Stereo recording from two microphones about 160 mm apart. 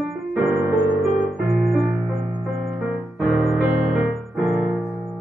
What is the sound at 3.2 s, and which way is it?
Music, centre (ahead or behind).